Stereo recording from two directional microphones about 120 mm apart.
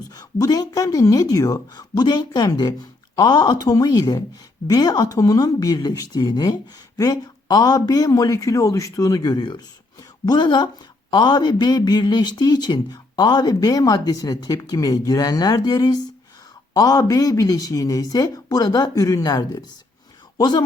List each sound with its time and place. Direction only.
0.1 s speech: 30° left (ahead or behind)